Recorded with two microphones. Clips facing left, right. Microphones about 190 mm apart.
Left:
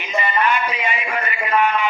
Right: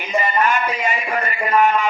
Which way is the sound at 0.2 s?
45° right (ahead or behind).